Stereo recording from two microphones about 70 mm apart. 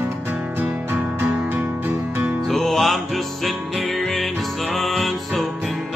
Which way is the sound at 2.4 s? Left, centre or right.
Centre.